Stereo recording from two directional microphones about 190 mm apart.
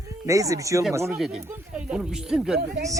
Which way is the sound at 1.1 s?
5° right (ahead or behind).